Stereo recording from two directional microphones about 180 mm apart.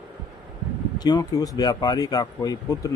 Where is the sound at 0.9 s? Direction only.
20° left (ahead or behind).